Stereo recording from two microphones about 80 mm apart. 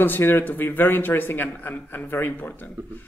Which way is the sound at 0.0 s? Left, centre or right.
Left.